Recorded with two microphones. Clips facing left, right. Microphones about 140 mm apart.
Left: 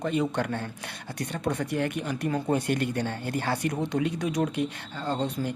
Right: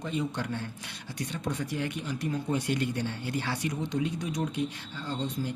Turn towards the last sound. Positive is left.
turn(degrees=60)  # may be behind; listen again after turning